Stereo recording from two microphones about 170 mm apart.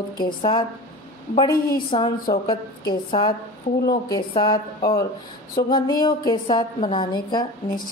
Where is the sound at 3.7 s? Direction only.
45° left (ahead or behind).